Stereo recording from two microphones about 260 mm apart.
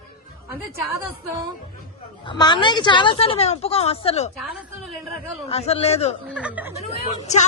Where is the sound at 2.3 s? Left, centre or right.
Centre.